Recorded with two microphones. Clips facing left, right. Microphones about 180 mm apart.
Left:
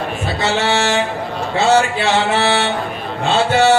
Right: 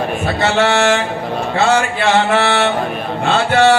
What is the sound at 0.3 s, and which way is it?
Speech, 55° right (ahead or behind).